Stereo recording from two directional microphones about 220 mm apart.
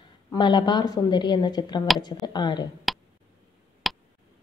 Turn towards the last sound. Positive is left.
turn(degrees=0)  # may be behind; listen again after turning